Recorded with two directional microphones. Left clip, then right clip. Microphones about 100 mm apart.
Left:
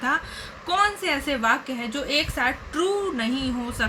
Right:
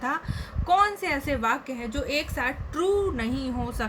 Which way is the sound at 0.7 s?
50° right (ahead or behind).